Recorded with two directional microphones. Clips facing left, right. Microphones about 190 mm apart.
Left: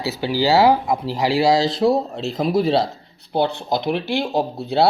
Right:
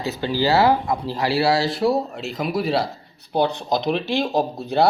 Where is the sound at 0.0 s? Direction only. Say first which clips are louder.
Left 1 dB; 10° left (ahead or behind).